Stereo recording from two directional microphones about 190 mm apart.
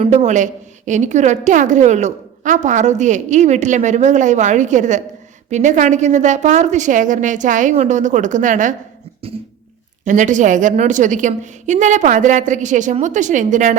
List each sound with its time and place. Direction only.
0.0 s a woman's voice: 35° right (ahead or behind)
10.1 s a woman's voice: 40° right (ahead or behind)